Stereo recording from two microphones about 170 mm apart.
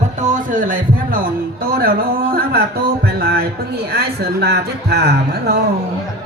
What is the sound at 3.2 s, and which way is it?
Music, 65° right (ahead or behind).